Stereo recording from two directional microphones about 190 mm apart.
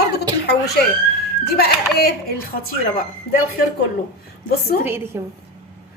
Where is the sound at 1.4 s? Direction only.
55° left (ahead or behind).